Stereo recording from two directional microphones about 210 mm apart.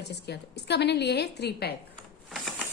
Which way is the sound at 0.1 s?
55° left (ahead or behind).